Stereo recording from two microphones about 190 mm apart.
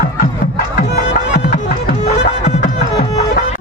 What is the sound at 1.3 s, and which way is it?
Music, 50° left (ahead or behind).